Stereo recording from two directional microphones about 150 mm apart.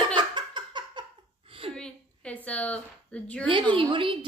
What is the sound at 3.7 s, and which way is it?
Speech, 35° right (ahead or behind).